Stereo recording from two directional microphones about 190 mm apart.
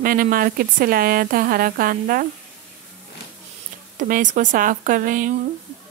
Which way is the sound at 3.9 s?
45° right (ahead or behind).